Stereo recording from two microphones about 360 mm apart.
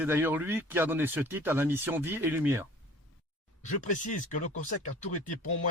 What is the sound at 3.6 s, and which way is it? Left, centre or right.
Speech, left.